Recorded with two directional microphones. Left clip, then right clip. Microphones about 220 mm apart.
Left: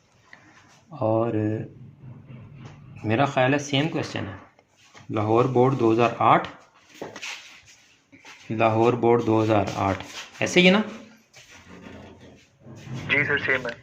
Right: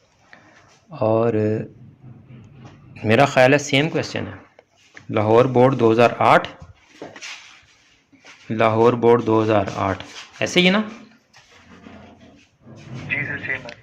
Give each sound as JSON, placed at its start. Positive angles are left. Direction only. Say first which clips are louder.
{"t": 0.9, "sound": "speech", "louder": "right 5 dB", "side_deg": -25}
{"t": 3.0, "sound": "speech", "louder": "right 7 dB", "side_deg": -35}
{"t": 5.1, "sound": "speech", "louder": "right 6 dB", "side_deg": -35}
{"t": 8.4, "sound": "speech", "louder": "right 4 dB", "side_deg": -25}
{"t": 13.1, "sound": "a sound", "louder": "left 3 dB", "side_deg": 25}